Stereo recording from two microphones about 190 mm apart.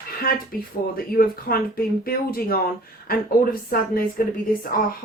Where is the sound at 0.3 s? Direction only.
50° left (ahead or behind).